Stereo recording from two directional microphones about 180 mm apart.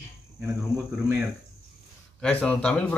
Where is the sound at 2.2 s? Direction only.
5° left (ahead or behind).